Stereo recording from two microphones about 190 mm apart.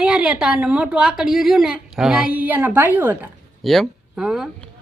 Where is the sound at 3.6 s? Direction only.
Centre (ahead or behind).